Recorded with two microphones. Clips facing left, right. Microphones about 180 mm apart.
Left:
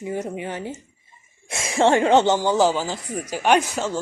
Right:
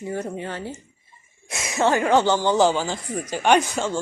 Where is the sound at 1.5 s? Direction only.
30° left (ahead or behind).